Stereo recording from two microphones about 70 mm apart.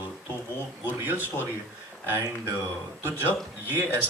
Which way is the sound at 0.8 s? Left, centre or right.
Right.